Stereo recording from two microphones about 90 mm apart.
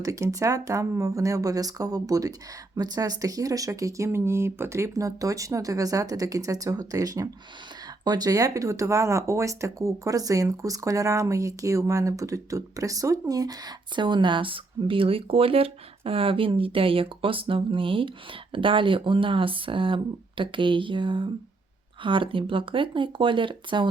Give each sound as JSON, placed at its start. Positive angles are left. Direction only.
{"t": 0.0, "sound": "speech", "side_deg": -40}
{"t": 13.9, "sound": "speech", "side_deg": -60}